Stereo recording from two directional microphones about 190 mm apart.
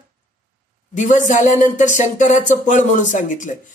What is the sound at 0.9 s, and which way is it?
Speech, 40° left (ahead or behind).